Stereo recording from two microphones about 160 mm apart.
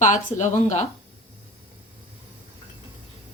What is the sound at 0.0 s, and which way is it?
Speech, 50° left (ahead or behind).